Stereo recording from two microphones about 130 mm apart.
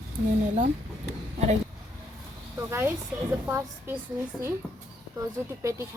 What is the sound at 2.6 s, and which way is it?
A woman's voice, 20° right (ahead or behind).